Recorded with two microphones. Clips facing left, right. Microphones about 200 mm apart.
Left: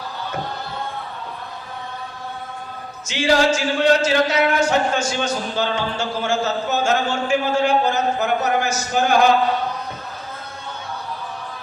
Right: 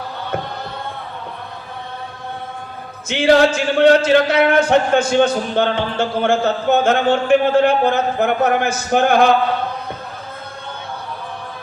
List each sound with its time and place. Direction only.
3.1 s speech: 55° right (ahead or behind)